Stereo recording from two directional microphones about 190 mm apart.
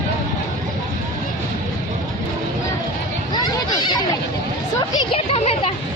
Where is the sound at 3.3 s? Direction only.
20° left (ahead or behind).